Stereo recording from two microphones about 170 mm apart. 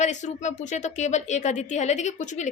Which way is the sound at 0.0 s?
45° left (ahead or behind).